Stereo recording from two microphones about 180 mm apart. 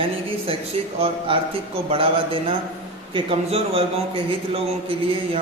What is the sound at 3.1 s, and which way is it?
A man's voice, 30° right (ahead or behind).